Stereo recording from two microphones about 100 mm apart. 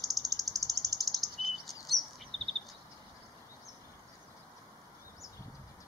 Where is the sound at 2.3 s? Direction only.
Centre (ahead or behind).